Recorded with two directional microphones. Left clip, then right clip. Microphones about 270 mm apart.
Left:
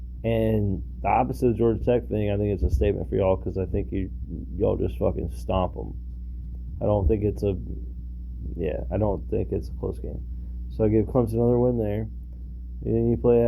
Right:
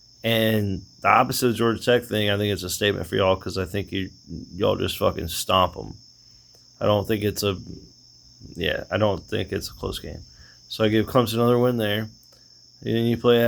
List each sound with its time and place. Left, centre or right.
0.2 s speech: centre